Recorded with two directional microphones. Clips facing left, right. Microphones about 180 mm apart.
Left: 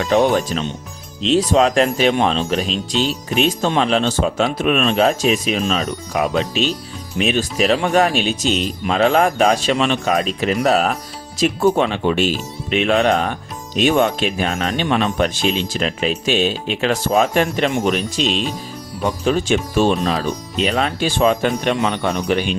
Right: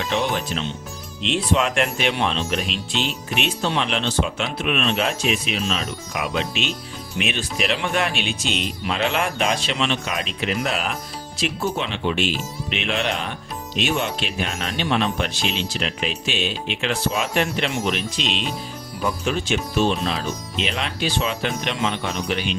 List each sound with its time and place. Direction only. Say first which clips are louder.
0.0 s speech: left 8 dB; 45° left (ahead or behind)